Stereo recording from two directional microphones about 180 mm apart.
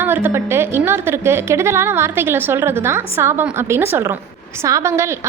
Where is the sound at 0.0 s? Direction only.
10° right (ahead or behind).